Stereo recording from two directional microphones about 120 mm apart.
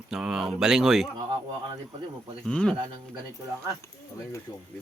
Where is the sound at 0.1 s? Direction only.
5° right (ahead or behind).